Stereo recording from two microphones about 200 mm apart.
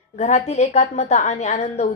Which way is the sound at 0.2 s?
35° left (ahead or behind).